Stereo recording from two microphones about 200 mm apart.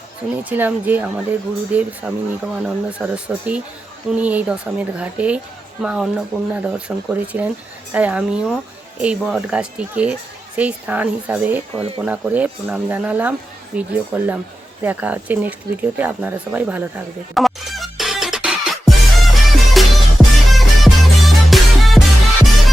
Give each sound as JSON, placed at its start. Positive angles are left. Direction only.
{"t": 0.4, "sound": "speech", "side_deg": -10}
{"t": 11.7, "sound": "speech", "side_deg": -30}
{"t": 12.0, "sound": "speech", "side_deg": -5}
{"t": 17.3, "sound": "music", "side_deg": 0}